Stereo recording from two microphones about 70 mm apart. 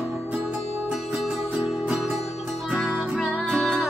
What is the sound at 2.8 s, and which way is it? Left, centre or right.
Music, right.